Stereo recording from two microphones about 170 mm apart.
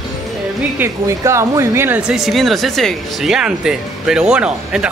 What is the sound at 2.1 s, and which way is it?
Speech, centre (ahead or behind).